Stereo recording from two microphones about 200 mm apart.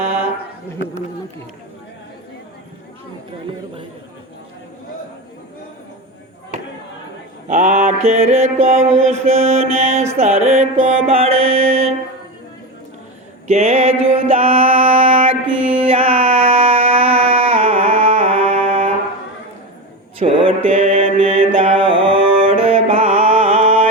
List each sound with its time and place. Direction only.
7.4 s mantra: 40° right (ahead or behind)
10.2 s music: 35° right (ahead or behind)
11.4 s mantra: 30° right (ahead or behind)
13.5 s mantra: 35° right (ahead or behind)
15.6 s a sound: 30° right (ahead or behind)
20.1 s mantra: 25° right (ahead or behind)